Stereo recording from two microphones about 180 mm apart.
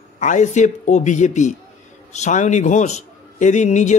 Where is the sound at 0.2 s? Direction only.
45° left (ahead or behind).